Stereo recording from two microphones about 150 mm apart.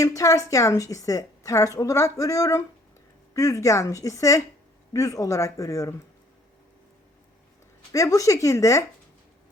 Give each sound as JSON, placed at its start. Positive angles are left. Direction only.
{"t": 0.0, "sound": "a woman's voice", "side_deg": 20}
{"t": 7.9, "sound": "a woman's voice", "side_deg": 20}